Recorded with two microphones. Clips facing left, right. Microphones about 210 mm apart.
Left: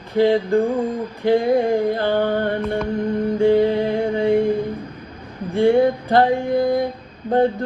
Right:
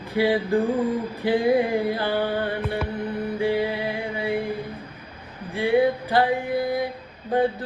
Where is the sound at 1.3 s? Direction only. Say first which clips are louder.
Left 4 dB; 45° left (ahead or behind).